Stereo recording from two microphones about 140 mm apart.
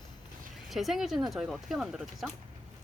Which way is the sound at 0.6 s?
Centre (ahead or behind).